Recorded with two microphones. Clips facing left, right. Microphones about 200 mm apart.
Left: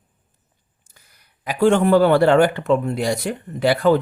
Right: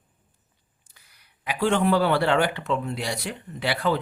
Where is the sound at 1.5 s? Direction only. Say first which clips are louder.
Left 6 dB; 45° left (ahead or behind).